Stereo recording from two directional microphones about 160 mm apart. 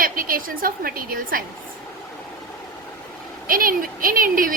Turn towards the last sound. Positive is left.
turn(degrees=-60)  # may be behind; listen again after turning